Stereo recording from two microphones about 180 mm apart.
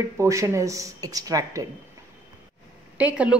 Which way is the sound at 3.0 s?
5° right (ahead or behind).